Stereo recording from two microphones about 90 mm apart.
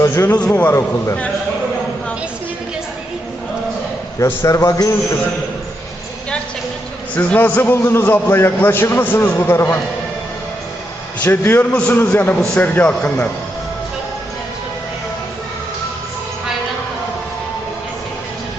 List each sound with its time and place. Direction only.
0.0 s a man's voice: 30° left (ahead or behind)
4.4 s a man's voice: 40° left (ahead or behind)
7.2 s a man's voice: 15° left (ahead or behind)
11.2 s a man's voice: 25° left (ahead or behind)
11.7 s speech: 10° left (ahead or behind)
11.9 s a man's voice: 20° left (ahead or behind)